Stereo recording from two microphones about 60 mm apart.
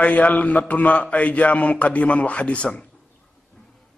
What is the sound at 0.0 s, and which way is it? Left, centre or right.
A man's voice, left.